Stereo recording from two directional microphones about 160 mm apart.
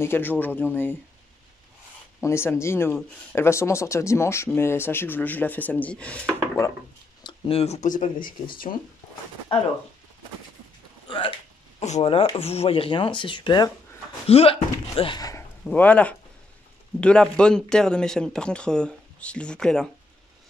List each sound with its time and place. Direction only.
0.0 s speech: 15° left (ahead or behind)
2.1 s speech: 15° left (ahead or behind)
7.2 s speech: 35° left (ahead or behind); by 8.7 s 60° left (ahead or behind)
11.1 s hiccup: 30° left (ahead or behind)
11.8 s speech: 40° left (ahead or behind); by 15.4 s 25° left (ahead or behind)
15.6 s speech: 10° left (ahead or behind)